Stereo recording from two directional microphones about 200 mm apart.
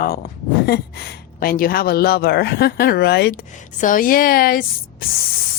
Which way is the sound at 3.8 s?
45° left (ahead or behind).